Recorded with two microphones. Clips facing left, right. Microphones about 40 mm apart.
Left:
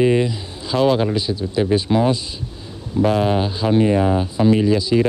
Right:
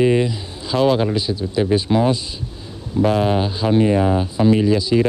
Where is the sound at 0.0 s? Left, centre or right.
Centre.